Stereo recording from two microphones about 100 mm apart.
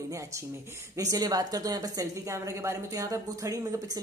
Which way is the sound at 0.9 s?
40° right (ahead or behind).